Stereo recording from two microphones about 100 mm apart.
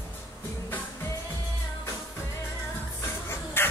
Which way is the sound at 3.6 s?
25° left (ahead or behind).